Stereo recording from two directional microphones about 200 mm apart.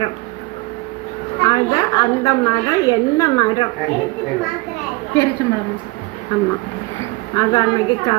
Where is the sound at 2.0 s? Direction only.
15° left (ahead or behind).